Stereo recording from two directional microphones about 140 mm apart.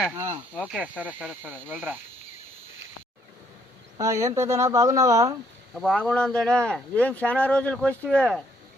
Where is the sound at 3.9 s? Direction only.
20° right (ahead or behind).